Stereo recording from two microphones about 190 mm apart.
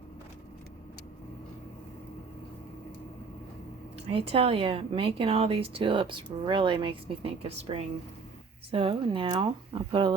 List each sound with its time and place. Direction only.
4.1 s speech: 30° right (ahead or behind)